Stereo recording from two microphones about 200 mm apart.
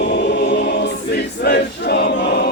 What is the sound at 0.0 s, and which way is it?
Choir, 65° left (ahead or behind).